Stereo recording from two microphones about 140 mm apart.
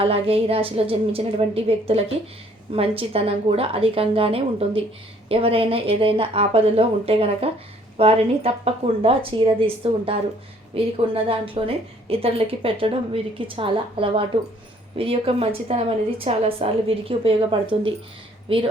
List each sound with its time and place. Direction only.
0.0 s a woman's voice: 45° right (ahead or behind)